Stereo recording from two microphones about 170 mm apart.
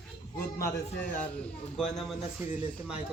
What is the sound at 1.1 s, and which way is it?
A man's voice, 5° left (ahead or behind).